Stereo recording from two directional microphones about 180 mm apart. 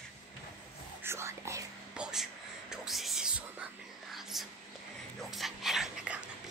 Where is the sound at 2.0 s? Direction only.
5° right (ahead or behind).